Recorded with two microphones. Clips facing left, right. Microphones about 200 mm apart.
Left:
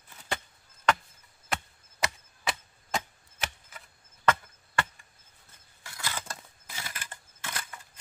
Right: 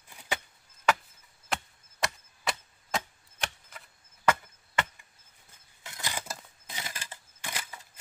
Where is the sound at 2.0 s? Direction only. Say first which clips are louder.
Even; centre (ahead or behind).